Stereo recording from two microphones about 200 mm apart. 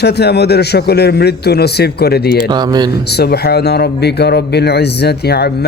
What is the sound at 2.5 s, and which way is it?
Speech, 20° right (ahead or behind).